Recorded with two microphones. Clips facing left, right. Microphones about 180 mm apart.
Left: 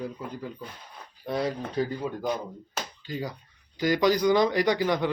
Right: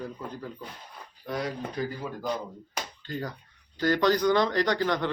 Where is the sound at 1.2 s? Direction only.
30° left (ahead or behind).